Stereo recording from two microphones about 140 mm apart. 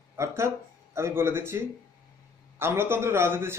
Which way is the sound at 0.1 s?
20° right (ahead or behind).